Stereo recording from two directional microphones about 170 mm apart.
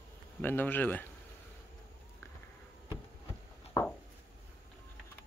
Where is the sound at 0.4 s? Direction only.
10° left (ahead or behind).